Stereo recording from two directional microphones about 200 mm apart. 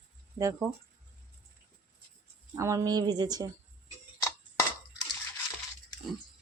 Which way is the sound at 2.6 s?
15° right (ahead or behind).